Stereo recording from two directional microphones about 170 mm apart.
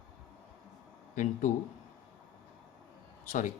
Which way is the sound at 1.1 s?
45° left (ahead or behind).